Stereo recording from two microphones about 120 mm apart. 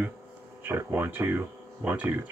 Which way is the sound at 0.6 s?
20° right (ahead or behind).